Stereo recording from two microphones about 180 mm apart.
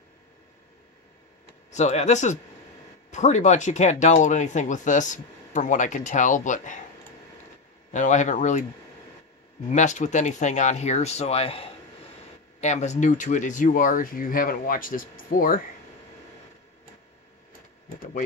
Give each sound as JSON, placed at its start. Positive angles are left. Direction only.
{"t": 1.7, "sound": "speech", "side_deg": 40}
{"t": 7.9, "sound": "speech", "side_deg": 40}
{"t": 9.7, "sound": "speech", "side_deg": 40}
{"t": 17.8, "sound": "speech", "side_deg": 50}